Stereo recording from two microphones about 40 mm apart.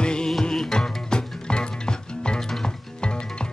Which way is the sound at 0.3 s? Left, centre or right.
Centre.